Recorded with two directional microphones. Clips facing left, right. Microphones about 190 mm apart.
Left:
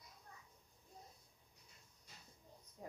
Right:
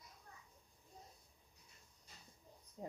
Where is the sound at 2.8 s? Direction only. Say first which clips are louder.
Right 4 dB; 25° right (ahead or behind).